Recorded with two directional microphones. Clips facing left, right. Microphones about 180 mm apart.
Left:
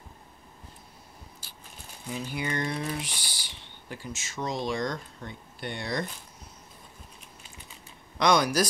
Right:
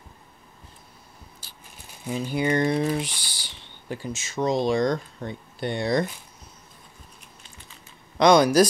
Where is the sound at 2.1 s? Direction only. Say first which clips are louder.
Right 8 dB; 30° right (ahead or behind).